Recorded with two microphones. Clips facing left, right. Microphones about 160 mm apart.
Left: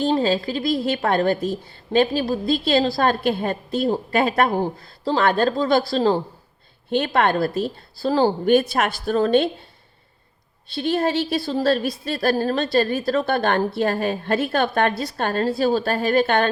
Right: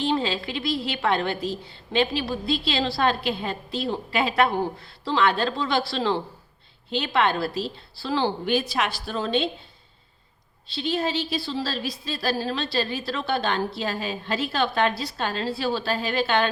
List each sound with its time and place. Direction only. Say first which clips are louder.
0.0 s a woman's voice: left 5 dB; 40° left (ahead or behind)
6.9 s a woman's voice: left 4 dB; 50° left (ahead or behind)
10.7 s a woman's voice: left 5 dB; 55° left (ahead or behind)